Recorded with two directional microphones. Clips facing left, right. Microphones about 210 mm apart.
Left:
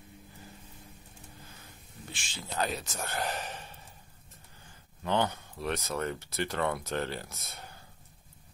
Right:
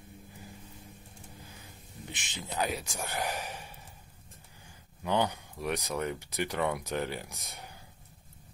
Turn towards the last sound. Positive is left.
turn(degrees=-15)  # may be behind; listen again after turning